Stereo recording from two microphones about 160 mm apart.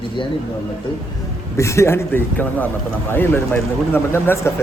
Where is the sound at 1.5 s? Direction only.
20° left (ahead or behind).